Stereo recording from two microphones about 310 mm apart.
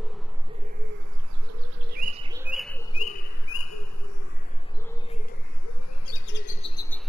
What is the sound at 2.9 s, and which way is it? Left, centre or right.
Bird, left.